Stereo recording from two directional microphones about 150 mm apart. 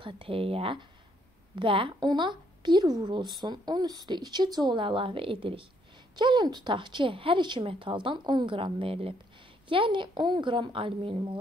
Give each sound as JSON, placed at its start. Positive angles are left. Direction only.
{"t": 0.0, "sound": "a woman's voice", "side_deg": -40}